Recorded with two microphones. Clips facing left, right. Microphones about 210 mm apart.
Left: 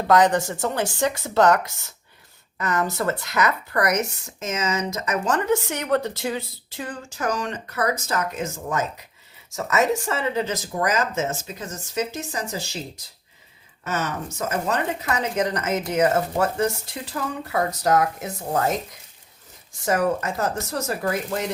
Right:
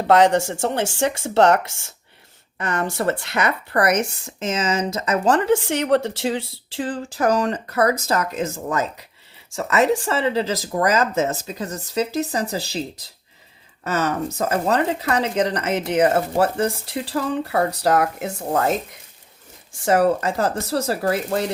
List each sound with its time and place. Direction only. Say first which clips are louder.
0.1 s speech: right 3 dB; 25° right (ahead or behind)
13.8 s speech: right 5 dB; 35° right (ahead or behind)
19.7 s speech: right 4 dB; 30° right (ahead or behind)